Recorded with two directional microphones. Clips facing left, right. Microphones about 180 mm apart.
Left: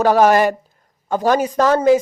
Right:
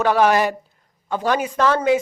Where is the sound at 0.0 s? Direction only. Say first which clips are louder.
Left 4 dB; 40° left (ahead or behind).